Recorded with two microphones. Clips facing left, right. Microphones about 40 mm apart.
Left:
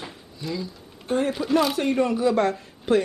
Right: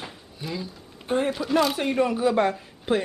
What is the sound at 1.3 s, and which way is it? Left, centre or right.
A man's voice, centre.